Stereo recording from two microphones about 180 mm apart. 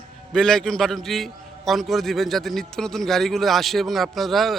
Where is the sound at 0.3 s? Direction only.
5° left (ahead or behind).